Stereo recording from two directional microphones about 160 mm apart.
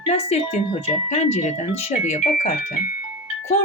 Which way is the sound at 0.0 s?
40° left (ahead or behind).